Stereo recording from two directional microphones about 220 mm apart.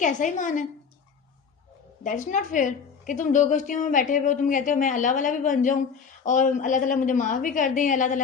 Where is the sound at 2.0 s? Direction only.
35° left (ahead or behind).